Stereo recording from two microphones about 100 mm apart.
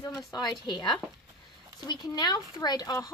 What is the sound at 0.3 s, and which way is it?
Speech, 45° left (ahead or behind).